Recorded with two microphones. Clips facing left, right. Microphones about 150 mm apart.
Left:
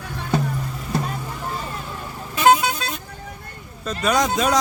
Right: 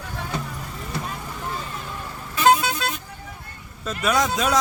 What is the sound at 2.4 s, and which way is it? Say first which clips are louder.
Vehicle: left 2 dB; 20° left (ahead or behind).